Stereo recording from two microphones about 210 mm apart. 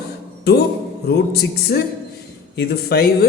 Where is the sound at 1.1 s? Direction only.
50° left (ahead or behind).